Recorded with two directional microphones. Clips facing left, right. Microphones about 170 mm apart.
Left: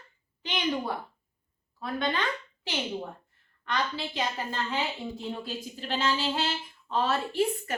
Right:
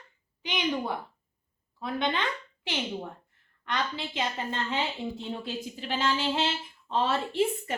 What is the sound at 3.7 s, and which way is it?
A woman's voice, 20° right (ahead or behind).